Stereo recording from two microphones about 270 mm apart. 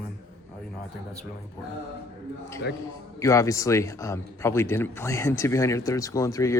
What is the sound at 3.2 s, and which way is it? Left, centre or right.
A man's voice, centre.